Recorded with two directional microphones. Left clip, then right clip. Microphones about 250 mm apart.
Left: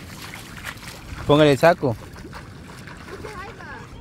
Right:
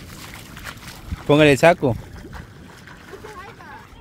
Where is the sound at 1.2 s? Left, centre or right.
Centre.